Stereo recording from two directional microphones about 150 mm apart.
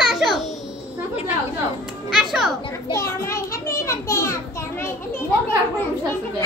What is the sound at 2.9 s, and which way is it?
A child's voice, 20° left (ahead or behind).